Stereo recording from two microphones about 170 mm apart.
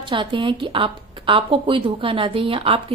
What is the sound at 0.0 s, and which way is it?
A woman's voice, 30° right (ahead or behind).